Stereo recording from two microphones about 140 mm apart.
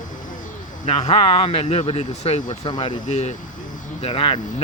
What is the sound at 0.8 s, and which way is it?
Speech, 50° left (ahead or behind).